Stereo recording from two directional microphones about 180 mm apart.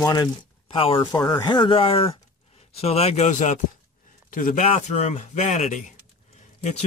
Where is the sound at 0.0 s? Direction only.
25° left (ahead or behind); by 4.6 s 50° left (ahead or behind).